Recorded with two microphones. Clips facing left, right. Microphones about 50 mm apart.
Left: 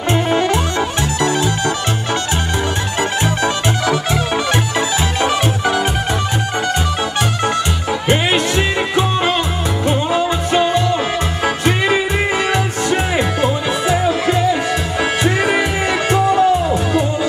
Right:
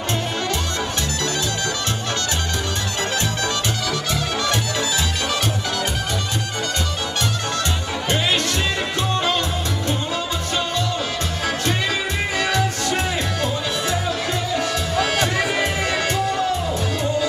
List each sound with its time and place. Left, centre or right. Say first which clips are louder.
0.1 s music: left 10 dB; left
3.0 s music: left 6 dB; left
8.1 s music: left 6 dB; left